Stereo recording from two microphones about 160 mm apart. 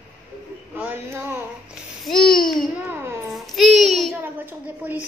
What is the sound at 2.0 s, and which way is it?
Speech, 5° left (ahead or behind).